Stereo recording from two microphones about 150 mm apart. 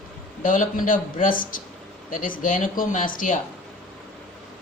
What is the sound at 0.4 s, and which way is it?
Speech, 60° left (ahead or behind).